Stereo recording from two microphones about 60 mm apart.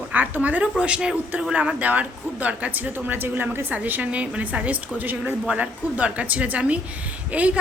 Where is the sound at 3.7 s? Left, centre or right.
Right.